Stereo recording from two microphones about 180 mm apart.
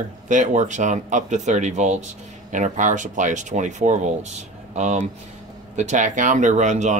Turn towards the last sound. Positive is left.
turn(degrees=-40)  # may be behind; listen again after turning